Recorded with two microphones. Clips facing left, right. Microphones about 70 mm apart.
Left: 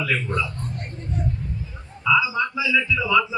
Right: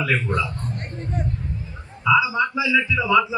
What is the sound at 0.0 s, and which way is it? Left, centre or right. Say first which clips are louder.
Speech: right 2 dB; right.